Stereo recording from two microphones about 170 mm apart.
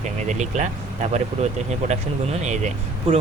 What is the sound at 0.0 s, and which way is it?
Speech, 45° right (ahead or behind).